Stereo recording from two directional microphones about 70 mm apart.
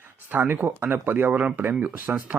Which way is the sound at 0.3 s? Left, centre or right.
Right.